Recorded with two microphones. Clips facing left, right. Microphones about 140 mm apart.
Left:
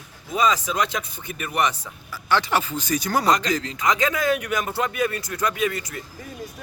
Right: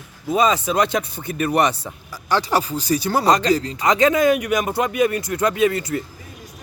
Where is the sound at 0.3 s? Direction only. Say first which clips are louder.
Right 4 dB; 30° right (ahead or behind).